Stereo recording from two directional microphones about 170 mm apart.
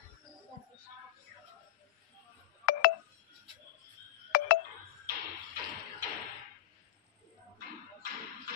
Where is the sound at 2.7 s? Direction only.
55° left (ahead or behind).